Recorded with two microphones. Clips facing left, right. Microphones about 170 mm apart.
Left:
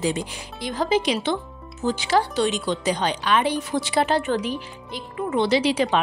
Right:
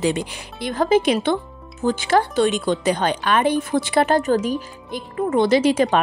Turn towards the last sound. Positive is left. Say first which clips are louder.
# right 4 dB
turn(degrees=-45)  # may be behind; listen again after turning